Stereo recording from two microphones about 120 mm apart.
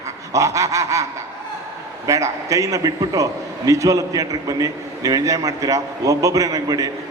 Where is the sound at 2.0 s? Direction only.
25° right (ahead or behind).